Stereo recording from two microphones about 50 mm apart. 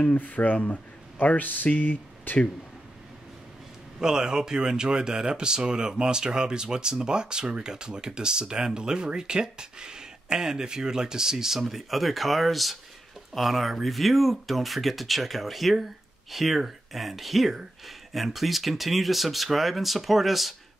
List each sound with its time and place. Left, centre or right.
0.0 s speech: left
4.0 s speech: centre